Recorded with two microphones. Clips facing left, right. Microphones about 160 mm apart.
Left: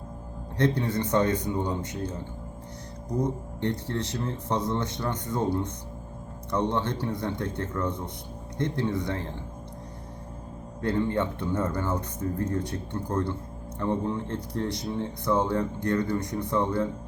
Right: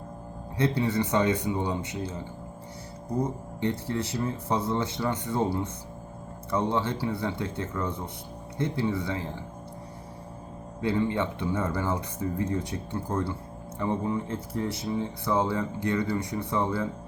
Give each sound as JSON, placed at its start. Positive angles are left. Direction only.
{"t": 0.5, "sound": "speech", "side_deg": -10}
{"t": 3.7, "sound": "speech", "side_deg": -10}
{"t": 7.4, "sound": "speech", "side_deg": 60}
{"t": 7.8, "sound": "speech", "side_deg": -10}
{"t": 10.8, "sound": "speech", "side_deg": -5}
{"t": 14.2, "sound": "speech", "side_deg": 70}
{"t": 14.7, "sound": "speech", "side_deg": -5}